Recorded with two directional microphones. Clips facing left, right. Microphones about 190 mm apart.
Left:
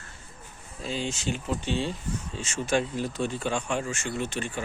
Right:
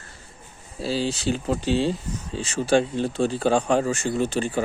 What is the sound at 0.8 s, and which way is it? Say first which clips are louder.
Speech: right 7 dB; 35° right (ahead or behind).